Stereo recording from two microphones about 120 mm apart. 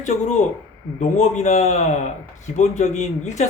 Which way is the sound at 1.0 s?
80° left.